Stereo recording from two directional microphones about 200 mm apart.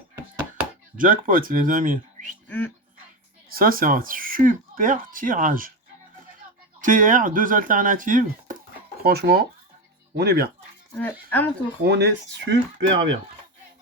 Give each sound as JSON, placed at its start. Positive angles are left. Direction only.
{"t": 0.9, "sound": "speech", "side_deg": -45}
{"t": 2.5, "sound": "speech", "side_deg": 10}
{"t": 3.5, "sound": "speech", "side_deg": -45}
{"t": 6.8, "sound": "speech", "side_deg": -40}
{"t": 10.9, "sound": "speech", "side_deg": 10}
{"t": 11.9, "sound": "speech", "side_deg": -55}